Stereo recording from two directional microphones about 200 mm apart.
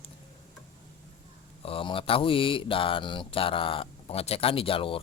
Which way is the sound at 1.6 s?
25° left (ahead or behind).